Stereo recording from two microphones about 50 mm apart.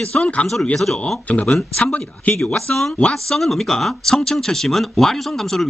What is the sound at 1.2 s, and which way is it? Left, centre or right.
Speech, left.